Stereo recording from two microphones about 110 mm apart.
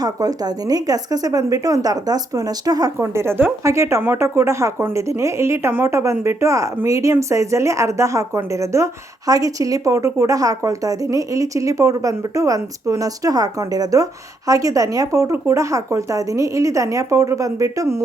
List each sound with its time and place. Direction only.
0.0 s a woman's voice: 35° right (ahead or behind)
3.0 s speech: 25° right (ahead or behind)